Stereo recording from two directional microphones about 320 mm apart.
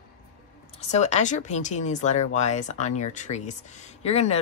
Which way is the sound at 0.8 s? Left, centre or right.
Left.